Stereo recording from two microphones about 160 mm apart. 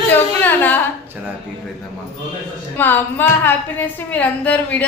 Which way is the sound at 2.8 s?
10° left (ahead or behind).